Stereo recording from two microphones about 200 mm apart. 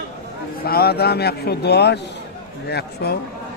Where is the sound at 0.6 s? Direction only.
50° left (ahead or behind).